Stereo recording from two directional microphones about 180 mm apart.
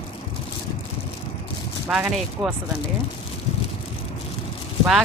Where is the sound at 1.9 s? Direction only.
Centre (ahead or behind).